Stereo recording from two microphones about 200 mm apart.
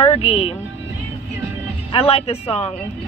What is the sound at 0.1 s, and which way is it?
Speech, 30° left (ahead or behind).